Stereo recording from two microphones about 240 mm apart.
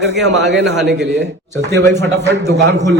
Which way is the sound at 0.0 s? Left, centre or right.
Right.